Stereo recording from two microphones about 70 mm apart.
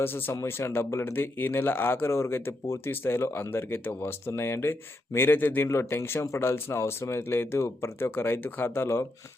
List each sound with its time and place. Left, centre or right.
0.0 s speech: left
5.6 s speech: left